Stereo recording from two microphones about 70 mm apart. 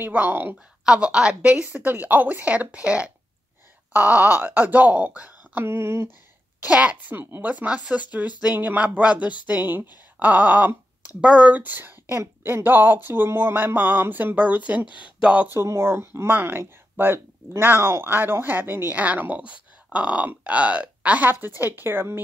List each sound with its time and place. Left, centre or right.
0.0 s speech: right
0.8 s speech: centre
5.7 s a sound: right
6.6 s speech: centre
7.2 s a sound: right
7.4 s speech: centre
11.5 s speech: right
15.1 s speech: centre
15.4 s speech: right